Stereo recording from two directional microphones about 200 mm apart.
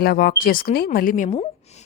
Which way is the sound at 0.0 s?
50° left (ahead or behind).